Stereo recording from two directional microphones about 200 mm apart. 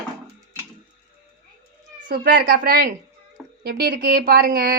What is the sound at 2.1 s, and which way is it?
Speech, 45° right (ahead or behind).